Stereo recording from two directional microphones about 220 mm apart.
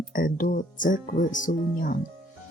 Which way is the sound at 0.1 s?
40° left (ahead or behind).